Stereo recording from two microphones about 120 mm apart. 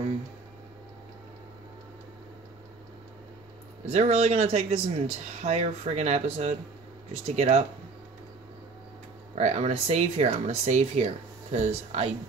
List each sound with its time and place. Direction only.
3.8 s speech: 60° right (ahead or behind)
9.3 s speech: 65° right (ahead or behind)